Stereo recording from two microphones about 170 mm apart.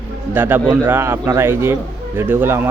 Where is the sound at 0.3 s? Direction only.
10° right (ahead or behind).